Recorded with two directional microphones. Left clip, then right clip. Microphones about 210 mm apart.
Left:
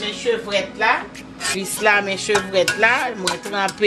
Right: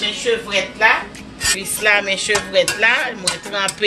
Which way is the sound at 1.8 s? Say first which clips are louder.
Right 1 dB; 50° left (ahead or behind).